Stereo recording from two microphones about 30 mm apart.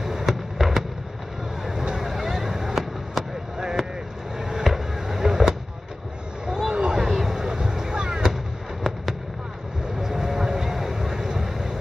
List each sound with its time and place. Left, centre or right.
0.0 s fireworks: centre
1.6 s vehicle: centre
3.5 s vehicle: right
4.4 s a sound: centre
6.7 s a sound: right
7.0 s vehicle: centre
9.9 s vehicle: centre